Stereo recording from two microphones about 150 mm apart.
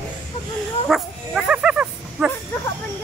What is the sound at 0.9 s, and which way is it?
Dog, centre (ahead or behind).